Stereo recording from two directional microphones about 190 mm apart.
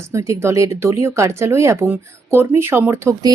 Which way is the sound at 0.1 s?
15° right (ahead or behind).